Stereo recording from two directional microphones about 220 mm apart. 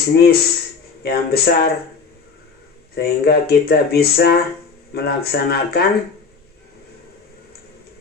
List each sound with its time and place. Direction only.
0.1 s speech: 45° left (ahead or behind)
2.9 s speech: 45° left (ahead or behind)